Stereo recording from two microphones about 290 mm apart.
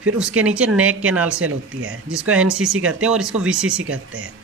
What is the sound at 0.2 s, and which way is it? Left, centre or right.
Speech, centre.